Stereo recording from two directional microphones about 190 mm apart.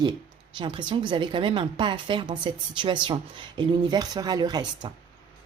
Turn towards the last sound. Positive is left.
turn(degrees=-20)  # may be behind; listen again after turning